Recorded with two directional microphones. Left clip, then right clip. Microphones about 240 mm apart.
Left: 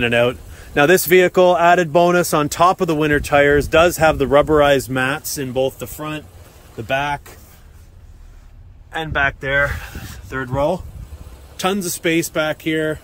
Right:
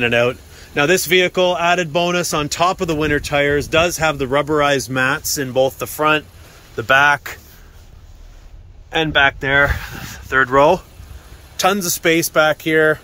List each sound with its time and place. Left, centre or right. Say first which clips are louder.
0.0 s a man's voice: even; centre
8.9 s speech: right 5 dB; right
10.3 s a man's voice: right 8 dB; centre